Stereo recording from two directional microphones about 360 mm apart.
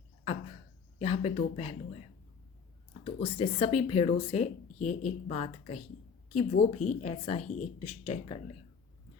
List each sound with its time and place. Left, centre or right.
0.9 s speech: centre
3.0 s a woman's voice: centre